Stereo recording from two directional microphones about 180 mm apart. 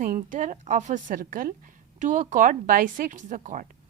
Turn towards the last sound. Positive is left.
turn(degrees=-45)  # may be behind; listen again after turning